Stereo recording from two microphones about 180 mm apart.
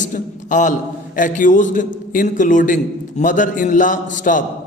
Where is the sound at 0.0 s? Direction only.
45° left (ahead or behind).